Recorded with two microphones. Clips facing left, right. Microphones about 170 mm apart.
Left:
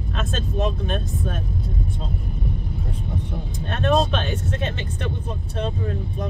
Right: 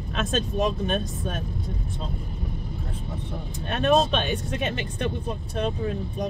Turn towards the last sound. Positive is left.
turn(degrees=-15)  # may be behind; listen again after turning